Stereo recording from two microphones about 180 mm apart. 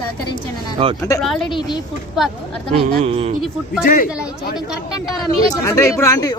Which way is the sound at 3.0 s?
35° right (ahead or behind).